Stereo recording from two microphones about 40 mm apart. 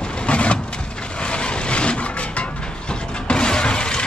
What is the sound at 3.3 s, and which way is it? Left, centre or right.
Shatter, left.